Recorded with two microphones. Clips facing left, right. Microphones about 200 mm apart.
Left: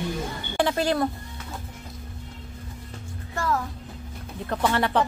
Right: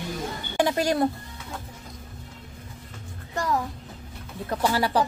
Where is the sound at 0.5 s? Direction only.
10° right (ahead or behind).